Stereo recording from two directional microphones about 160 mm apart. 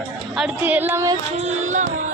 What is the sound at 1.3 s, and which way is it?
Carnatic music, 45° right (ahead or behind).